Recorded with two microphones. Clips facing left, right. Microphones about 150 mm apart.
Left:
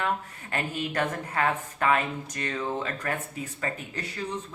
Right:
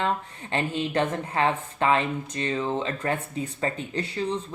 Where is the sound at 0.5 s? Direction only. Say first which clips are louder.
Right 4 dB; 25° right (ahead or behind).